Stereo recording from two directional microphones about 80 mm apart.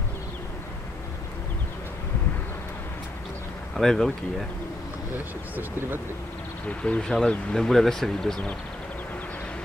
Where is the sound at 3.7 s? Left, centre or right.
Centre.